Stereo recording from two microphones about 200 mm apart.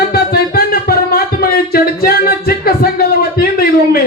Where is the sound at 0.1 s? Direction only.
50° left (ahead or behind).